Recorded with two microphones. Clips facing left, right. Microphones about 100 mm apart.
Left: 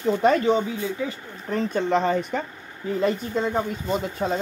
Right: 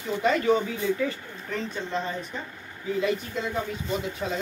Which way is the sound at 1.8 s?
70° left (ahead or behind).